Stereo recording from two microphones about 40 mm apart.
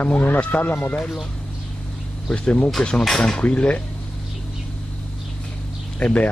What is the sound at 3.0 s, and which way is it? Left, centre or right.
Speech, centre.